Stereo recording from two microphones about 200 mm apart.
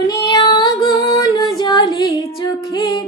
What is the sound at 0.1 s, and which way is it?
Female singing, 20° left (ahead or behind).